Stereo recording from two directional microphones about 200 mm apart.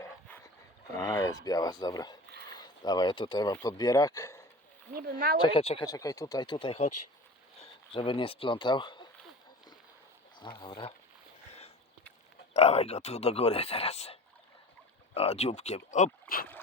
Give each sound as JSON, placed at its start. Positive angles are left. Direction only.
{"t": 0.9, "sound": "speech", "side_deg": 15}
{"t": 4.9, "sound": "speech", "side_deg": -45}
{"t": 5.4, "sound": "speech", "side_deg": 25}
{"t": 10.6, "sound": "speech", "side_deg": 25}
{"t": 12.5, "sound": "speech", "side_deg": 30}